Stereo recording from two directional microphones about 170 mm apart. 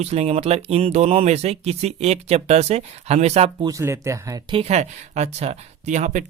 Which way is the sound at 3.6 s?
15° right (ahead or behind).